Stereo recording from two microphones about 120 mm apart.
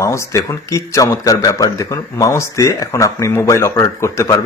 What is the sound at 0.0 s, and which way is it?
Speech, 25° left (ahead or behind).